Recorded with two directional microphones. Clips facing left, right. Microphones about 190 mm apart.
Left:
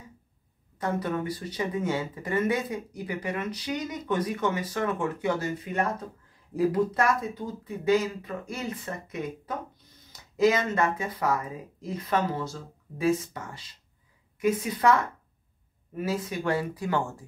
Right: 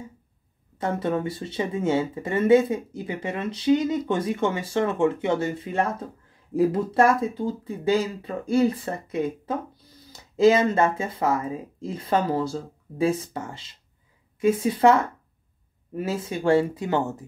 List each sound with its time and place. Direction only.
0.7 s speech: 25° right (ahead or behind)
16.0 s speech: 30° right (ahead or behind)